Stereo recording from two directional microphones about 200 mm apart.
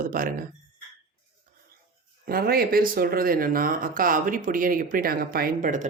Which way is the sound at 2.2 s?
50° right (ahead or behind).